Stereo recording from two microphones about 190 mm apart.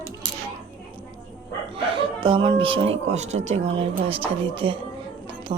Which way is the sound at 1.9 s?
25° right (ahead or behind).